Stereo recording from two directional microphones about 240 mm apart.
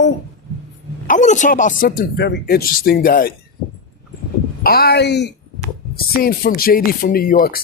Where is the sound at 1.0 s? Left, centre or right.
Left.